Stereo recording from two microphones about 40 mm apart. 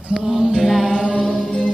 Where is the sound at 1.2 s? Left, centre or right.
Centre.